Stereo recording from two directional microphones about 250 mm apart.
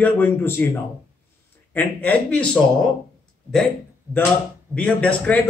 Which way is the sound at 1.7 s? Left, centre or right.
Centre.